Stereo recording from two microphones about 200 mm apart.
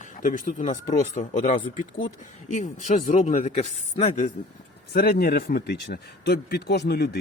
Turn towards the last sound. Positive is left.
turn(degrees=55)  # may be behind; listen again after turning